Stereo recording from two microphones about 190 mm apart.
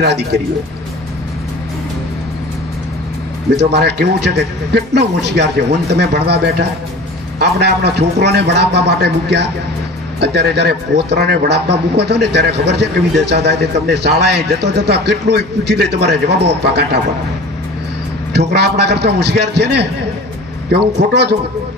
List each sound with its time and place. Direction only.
0.0 s speech: 60° right (ahead or behind)
3.5 s speech: 60° right (ahead or behind)
18.3 s speech: 60° right (ahead or behind)